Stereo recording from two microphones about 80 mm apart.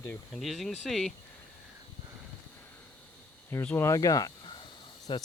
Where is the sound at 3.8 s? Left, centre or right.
Left.